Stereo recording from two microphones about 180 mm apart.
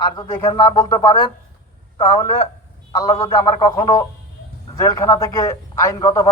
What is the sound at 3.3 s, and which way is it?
A man's voice, 20° left (ahead or behind).